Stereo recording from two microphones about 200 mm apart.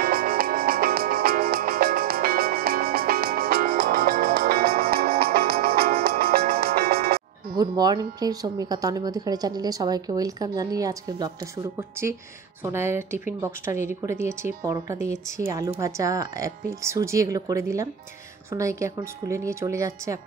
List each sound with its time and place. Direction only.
0.0 s music: 45° right (ahead or behind)
7.2 s speech: 20° right (ahead or behind)